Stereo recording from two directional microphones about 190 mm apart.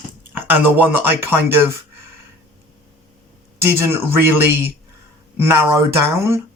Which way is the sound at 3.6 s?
15° right (ahead or behind).